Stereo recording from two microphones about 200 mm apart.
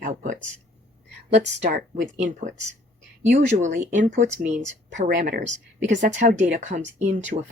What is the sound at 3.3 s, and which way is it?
Speech, 35° right (ahead or behind).